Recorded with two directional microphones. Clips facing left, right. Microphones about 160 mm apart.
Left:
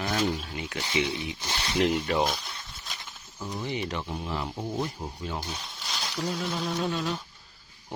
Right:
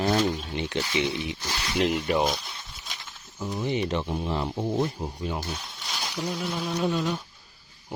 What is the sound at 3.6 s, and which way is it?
Speech, 20° right (ahead or behind).